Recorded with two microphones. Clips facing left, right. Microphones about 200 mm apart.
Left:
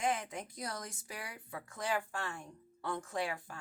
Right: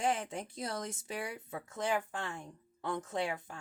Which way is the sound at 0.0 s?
30° right (ahead or behind).